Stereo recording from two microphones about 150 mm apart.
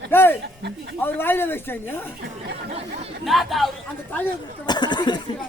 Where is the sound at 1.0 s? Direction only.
15° left (ahead or behind).